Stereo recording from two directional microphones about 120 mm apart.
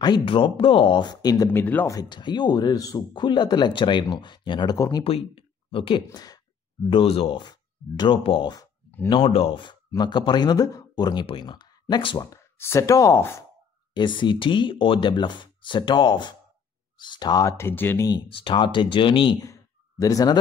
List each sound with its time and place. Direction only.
0.0 s speech: 40° left (ahead or behind)
1.5 s speech: 15° left (ahead or behind)
1.9 s speech: 35° left (ahead or behind)
4.7 s speech: 25° left (ahead or behind)
5.0 s speech: 50° left (ahead or behind)
6.1 s speech: 35° left (ahead or behind)
6.9 s speech: 55° left (ahead or behind)
7.4 s speech: 35° left (ahead or behind)
12.3 s speech: 25° left (ahead or behind)
13.9 s speech: 40° left (ahead or behind); by 18.0 s 20° left (ahead or behind)
18.3 s speech: 45° left (ahead or behind)
19.4 s a sound: 30° left (ahead or behind)